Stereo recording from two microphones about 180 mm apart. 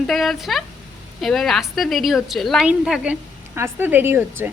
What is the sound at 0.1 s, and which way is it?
A woman's voice, centre (ahead or behind).